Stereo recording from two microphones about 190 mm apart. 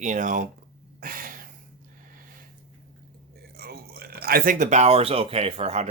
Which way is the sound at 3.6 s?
55° right (ahead or behind).